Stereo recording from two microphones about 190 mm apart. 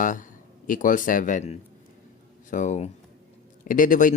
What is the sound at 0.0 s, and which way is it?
Speech, 45° left (ahead or behind).